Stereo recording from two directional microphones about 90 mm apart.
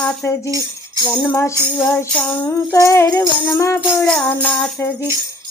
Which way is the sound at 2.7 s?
35° left (ahead or behind).